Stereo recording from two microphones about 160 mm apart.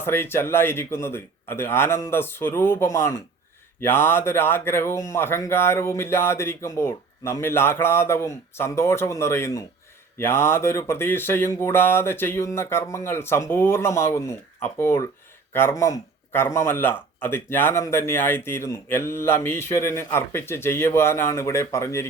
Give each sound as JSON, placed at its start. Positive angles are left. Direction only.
{"t": 0.0, "sound": "speech", "side_deg": 15}